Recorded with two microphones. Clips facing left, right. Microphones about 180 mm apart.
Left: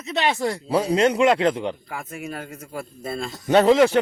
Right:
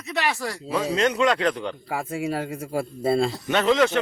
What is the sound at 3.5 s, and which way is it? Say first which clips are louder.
Speech: left 6 dB; 30° left (ahead or behind).